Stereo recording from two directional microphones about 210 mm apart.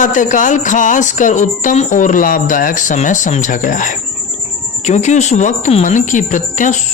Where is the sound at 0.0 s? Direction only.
35° left (ahead or behind).